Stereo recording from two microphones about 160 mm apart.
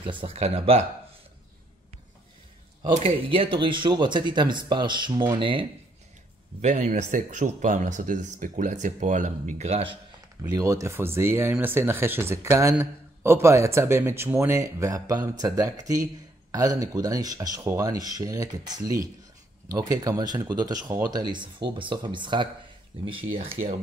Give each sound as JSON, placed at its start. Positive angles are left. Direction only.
{"t": 0.0, "sound": "speech", "side_deg": -30}
{"t": 2.9, "sound": "speech", "side_deg": -35}
{"t": 6.6, "sound": "speech", "side_deg": -50}
{"t": 10.5, "sound": "speech", "side_deg": -20}